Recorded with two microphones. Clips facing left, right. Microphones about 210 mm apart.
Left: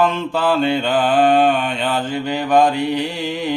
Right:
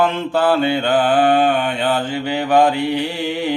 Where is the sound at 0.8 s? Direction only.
55° right (ahead or behind).